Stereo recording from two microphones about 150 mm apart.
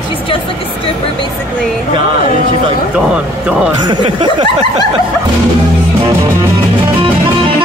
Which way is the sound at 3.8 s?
35° right (ahead or behind).